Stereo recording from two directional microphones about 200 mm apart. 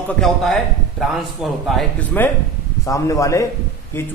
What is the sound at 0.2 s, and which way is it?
A man's voice, centre (ahead or behind).